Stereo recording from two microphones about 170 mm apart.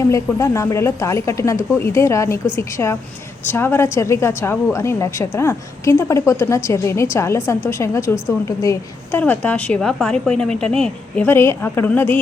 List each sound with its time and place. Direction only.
0.1 s a woman's voice: 20° left (ahead or behind)